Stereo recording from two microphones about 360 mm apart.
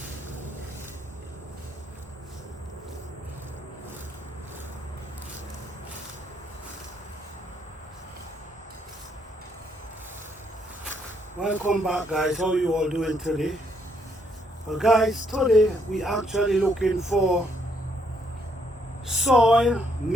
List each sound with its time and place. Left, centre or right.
11.3 s speech: centre
14.7 s speech: centre
19.0 s speech: centre